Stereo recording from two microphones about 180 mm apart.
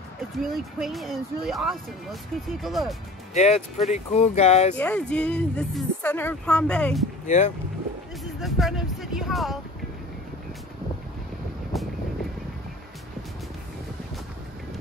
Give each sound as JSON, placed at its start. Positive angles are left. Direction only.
{"t": 0.4, "sound": "speech", "side_deg": 0}
{"t": 3.3, "sound": "speech", "side_deg": 35}
{"t": 4.7, "sound": "speech", "side_deg": 5}
{"t": 7.2, "sound": "speech", "side_deg": 40}
{"t": 8.2, "sound": "speech", "side_deg": 0}
{"t": 11.7, "sound": "vehicle", "side_deg": 0}